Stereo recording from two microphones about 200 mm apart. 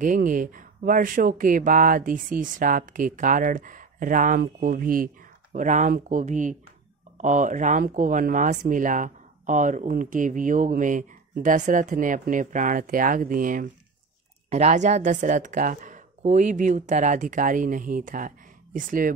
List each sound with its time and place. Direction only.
0.0 s speech: 40° right (ahead or behind)